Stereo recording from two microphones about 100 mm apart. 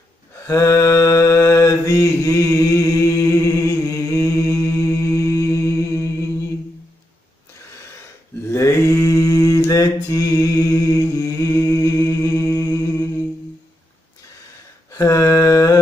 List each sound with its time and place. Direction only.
0.5 s mantra: 30° left (ahead or behind)
8.5 s mantra: 25° left (ahead or behind)
14.9 s mantra: 35° left (ahead or behind)